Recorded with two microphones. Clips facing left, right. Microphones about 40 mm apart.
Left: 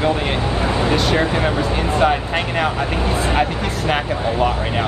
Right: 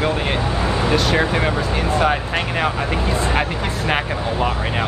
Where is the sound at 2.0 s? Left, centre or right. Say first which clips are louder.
Left 4 dB; centre.